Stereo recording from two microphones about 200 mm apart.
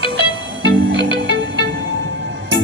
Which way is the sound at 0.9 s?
65° right (ahead or behind).